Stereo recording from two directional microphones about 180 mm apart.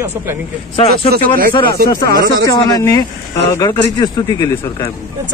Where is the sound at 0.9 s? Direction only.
55° right (ahead or behind).